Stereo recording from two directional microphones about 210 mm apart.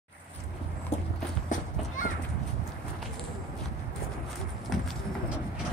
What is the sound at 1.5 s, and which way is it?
Run, 40° left (ahead or behind).